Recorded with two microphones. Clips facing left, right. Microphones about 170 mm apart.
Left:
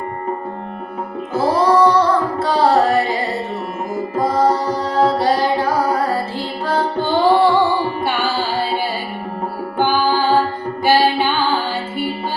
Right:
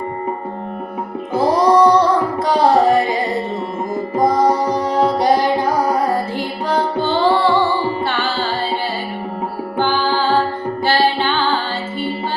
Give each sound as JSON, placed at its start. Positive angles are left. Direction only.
{"t": 1.3, "sound": "music", "side_deg": -15}
{"t": 7.0, "sound": "music", "side_deg": 15}
{"t": 8.0, "sound": "carnatic music", "side_deg": 15}
{"t": 9.7, "sound": "music", "side_deg": 15}